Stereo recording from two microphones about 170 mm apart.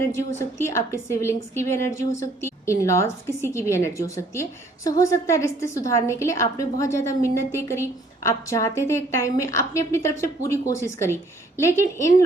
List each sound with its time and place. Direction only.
0.0 s a woman's voice: 15° left (ahead or behind)